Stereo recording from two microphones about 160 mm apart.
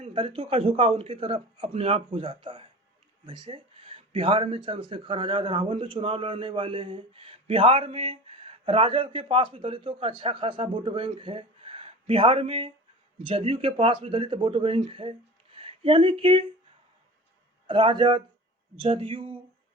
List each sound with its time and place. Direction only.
0.0 s speech: 35° right (ahead or behind)
17.7 s speech: 30° right (ahead or behind)